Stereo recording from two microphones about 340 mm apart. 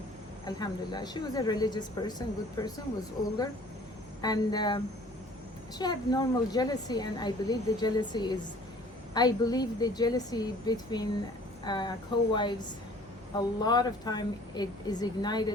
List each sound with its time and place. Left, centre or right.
0.4 s a woman's voice: centre
4.2 s a woman's voice: centre